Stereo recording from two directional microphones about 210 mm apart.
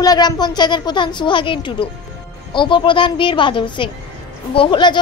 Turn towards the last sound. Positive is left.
turn(degrees=20)  # may be behind; listen again after turning